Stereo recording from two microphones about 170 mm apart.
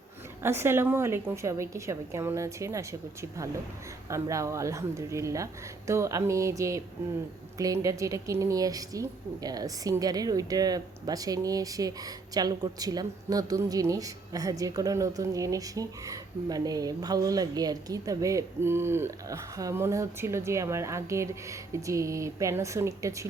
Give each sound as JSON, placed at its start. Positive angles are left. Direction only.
{"t": 0.4, "sound": "a woman's voice", "side_deg": -15}